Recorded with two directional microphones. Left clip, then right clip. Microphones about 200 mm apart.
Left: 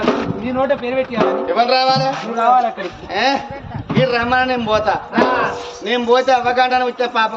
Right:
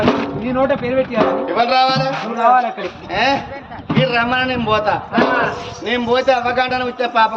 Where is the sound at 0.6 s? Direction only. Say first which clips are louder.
Right 1 dB; 15° right (ahead or behind).